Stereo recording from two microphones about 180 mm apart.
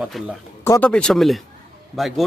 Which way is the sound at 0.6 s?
15° left (ahead or behind).